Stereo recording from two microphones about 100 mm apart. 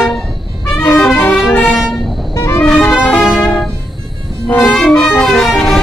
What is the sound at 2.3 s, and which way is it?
Music, 25° left (ahead or behind).